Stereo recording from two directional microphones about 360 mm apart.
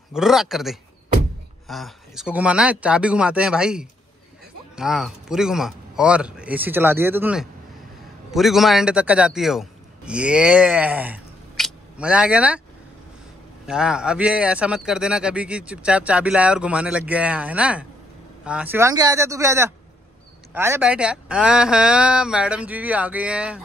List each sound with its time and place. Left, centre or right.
0.1 s a man's voice: centre
13.7 s speech: centre